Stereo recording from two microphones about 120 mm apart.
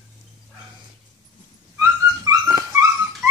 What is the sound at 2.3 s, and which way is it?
Dog, 30° right (ahead or behind).